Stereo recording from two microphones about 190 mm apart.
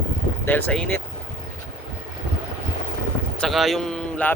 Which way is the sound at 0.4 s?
5° left (ahead or behind).